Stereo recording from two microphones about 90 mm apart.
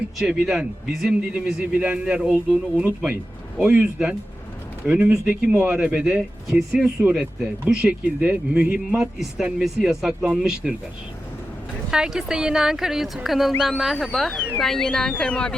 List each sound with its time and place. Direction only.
0.2 s a man's voice: 10° right (ahead or behind)
11.9 s speech: 10° right (ahead or behind); by 15.5 s 10° left (ahead or behind)